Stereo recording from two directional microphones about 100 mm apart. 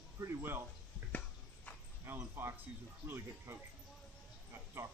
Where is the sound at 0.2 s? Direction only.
20° right (ahead or behind).